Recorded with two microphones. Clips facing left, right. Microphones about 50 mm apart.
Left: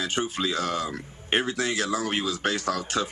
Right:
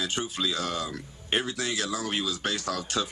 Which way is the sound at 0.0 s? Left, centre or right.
Left.